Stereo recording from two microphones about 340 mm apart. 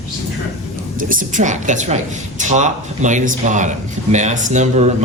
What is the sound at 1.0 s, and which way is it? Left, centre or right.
Speech, right.